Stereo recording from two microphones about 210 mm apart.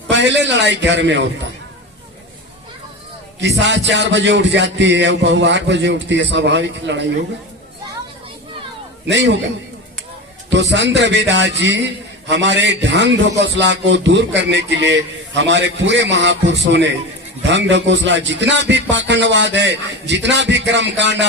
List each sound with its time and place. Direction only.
0.1 s a man's voice: 55° right (ahead or behind)
3.4 s a man's voice: 55° right (ahead or behind)
9.0 s a man's voice: 55° right (ahead or behind)
10.5 s a man's voice: 55° right (ahead or behind)